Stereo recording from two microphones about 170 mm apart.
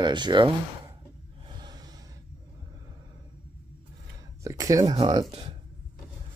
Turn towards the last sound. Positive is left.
turn(degrees=-25)  # may be behind; listen again after turning